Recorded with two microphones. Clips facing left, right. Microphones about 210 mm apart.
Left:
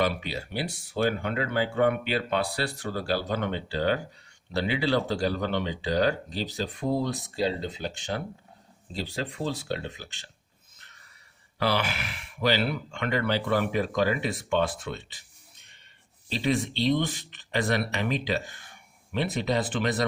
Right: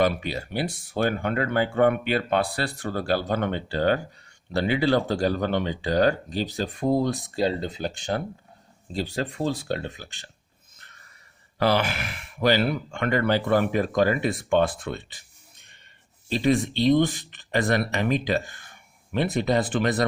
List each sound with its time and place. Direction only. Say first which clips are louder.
0.0 s speech: right 4 dB; 50° right (ahead or behind)
10.8 s a sound: right 3 dB; 50° right (ahead or behind)
11.6 s speech: right 4 dB; 50° right (ahead or behind)
16.3 s speech: right 5 dB; 50° right (ahead or behind)